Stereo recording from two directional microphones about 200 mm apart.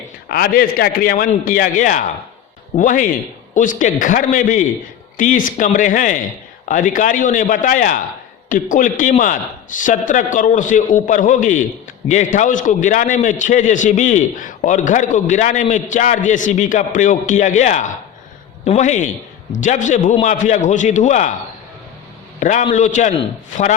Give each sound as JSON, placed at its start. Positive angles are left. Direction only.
{"t": 0.3, "sound": "a man's voice", "side_deg": 50}
{"t": 22.4, "sound": "a man's voice", "side_deg": 40}